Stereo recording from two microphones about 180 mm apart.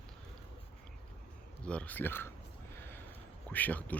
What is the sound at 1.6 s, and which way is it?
Speech, 5° left (ahead or behind).